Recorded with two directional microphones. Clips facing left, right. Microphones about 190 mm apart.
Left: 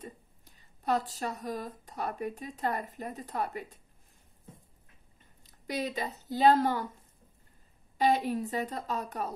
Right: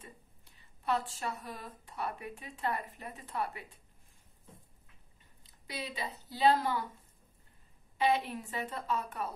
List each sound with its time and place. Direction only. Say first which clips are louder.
0.0 s speech: left 8 dB; 40° left (ahead or behind)
5.4 s speech: left 8 dB; 45° left (ahead or behind)
8.0 s speech: left 4 dB; 40° left (ahead or behind)